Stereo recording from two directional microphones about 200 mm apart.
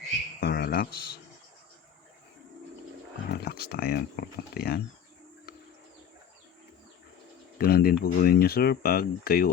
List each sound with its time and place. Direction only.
0.3 s insect: 50° left (ahead or behind)
3.2 s speech: 50° left (ahead or behind)
7.6 s speech: 50° left (ahead or behind)